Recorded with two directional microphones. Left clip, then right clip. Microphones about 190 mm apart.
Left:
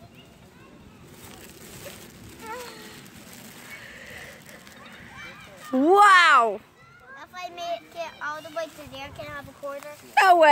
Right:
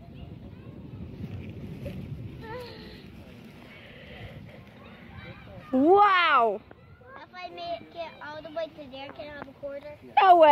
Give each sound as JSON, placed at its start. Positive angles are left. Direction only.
{"t": 5.8, "sound": "a child's voice", "side_deg": 20}
{"t": 7.2, "sound": "children playing", "side_deg": 15}
{"t": 9.8, "sound": "speech", "side_deg": 10}